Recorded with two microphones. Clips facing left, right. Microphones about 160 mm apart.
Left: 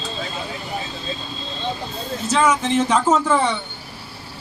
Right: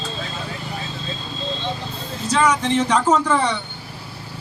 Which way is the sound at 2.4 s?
5° left (ahead or behind).